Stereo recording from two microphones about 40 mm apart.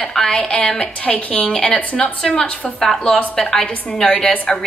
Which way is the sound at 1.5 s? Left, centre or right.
Left.